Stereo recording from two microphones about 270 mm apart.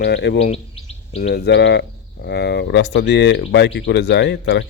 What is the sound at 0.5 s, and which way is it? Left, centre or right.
Bird, left.